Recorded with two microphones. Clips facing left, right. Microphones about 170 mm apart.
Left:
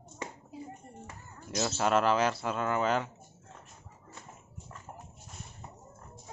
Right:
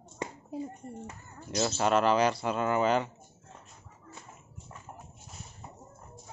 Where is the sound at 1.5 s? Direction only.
Centre (ahead or behind).